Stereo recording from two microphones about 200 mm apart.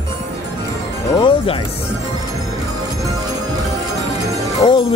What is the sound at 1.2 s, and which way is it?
Music, 30° left (ahead or behind).